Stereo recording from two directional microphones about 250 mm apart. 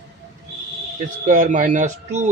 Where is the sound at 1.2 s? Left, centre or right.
Right.